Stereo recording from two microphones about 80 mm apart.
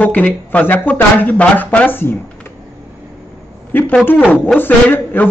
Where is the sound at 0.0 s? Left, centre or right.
Centre.